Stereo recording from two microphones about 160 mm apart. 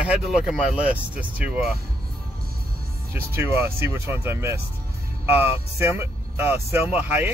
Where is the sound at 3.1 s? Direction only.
15° right (ahead or behind).